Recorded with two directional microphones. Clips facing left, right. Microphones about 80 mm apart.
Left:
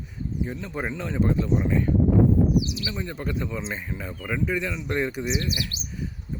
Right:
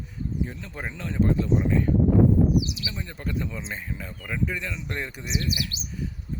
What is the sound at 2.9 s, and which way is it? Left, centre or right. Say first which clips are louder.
Speech: left 2 dB; centre.